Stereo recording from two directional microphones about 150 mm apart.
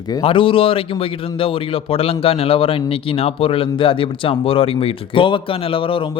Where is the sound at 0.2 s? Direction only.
35° left (ahead or behind).